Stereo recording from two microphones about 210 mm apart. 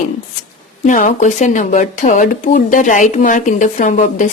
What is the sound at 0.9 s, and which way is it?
Speech, 35° left (ahead or behind).